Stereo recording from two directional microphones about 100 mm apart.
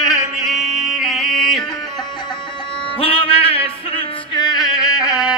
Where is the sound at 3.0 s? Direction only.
70° left (ahead or behind).